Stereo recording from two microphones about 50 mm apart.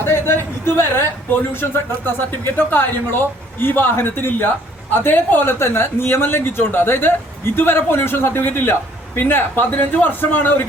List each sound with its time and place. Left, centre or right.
0.0 s a man's voice: left